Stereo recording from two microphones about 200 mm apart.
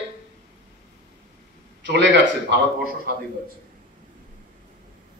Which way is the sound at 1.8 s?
60° right (ahead or behind).